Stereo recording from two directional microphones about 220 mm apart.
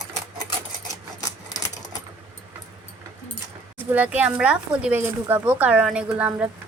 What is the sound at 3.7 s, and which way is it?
Speech, 10° right (ahead or behind).